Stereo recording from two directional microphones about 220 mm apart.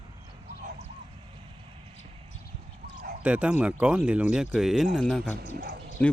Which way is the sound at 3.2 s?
5° right (ahead or behind).